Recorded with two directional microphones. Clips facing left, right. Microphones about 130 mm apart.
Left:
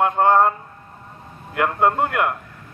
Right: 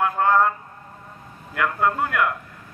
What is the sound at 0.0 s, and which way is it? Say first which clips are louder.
A man's voice: left 3 dB; 25° left (ahead or behind).